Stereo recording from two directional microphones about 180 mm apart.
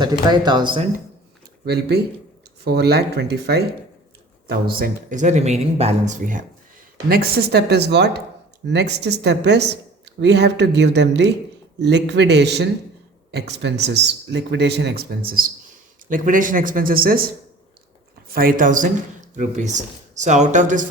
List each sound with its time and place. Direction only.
0.0 s speech: 25° right (ahead or behind)
1.6 s speech: 65° right (ahead or behind)
4.8 s speech: 45° right (ahead or behind)
7.1 s speech: 60° right (ahead or behind)
18.3 s speech: 55° right (ahead or behind)